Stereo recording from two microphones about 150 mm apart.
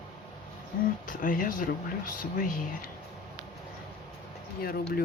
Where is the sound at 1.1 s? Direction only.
65° left (ahead or behind).